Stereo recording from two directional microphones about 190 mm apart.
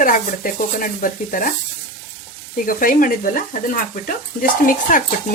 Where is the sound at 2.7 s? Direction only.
45° left (ahead or behind).